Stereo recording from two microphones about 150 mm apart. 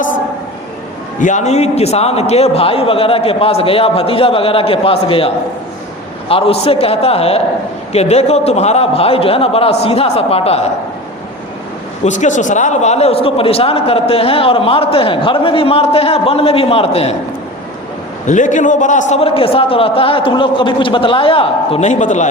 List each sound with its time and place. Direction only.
1.2 s a man's voice: 55° left (ahead or behind)
12.0 s a man's voice: 55° left (ahead or behind)
18.3 s a man's voice: 55° left (ahead or behind)